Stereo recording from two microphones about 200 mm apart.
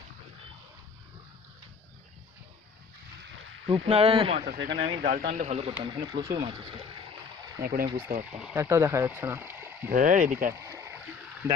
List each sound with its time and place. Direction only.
3.7 s speech: 30° right (ahead or behind)
4.4 s speech: 50° right (ahead or behind); by 7.6 s 20° right (ahead or behind)
7.6 s speech: 45° right (ahead or behind)
7.9 s speech: 10° right (ahead or behind)
9.9 s speech: 40° right (ahead or behind)
10.6 s rowboat: 15° right (ahead or behind)